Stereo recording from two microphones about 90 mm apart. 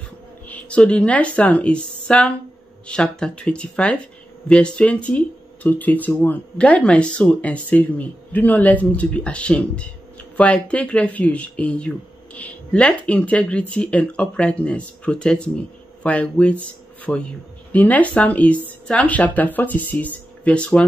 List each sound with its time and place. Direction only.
0.5 s speech: 15° left (ahead or behind)